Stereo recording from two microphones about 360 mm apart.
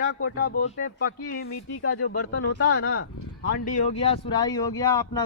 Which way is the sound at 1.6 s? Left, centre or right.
Left.